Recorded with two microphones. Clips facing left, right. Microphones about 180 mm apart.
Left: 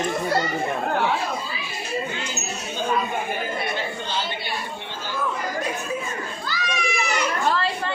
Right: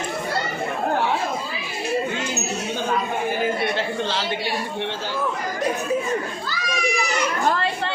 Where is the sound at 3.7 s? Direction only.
90° right.